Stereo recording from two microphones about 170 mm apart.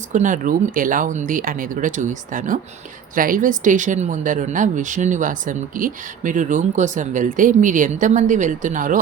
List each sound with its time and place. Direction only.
0.1 s speech: 50° right (ahead or behind)